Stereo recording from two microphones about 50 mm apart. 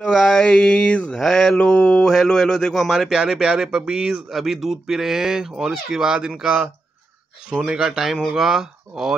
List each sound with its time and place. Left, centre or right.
0.0 s a sound: centre
1.2 s mantra: centre
2.0 s a man's voice: centre
3.1 s speech: centre
4.3 s speech: centre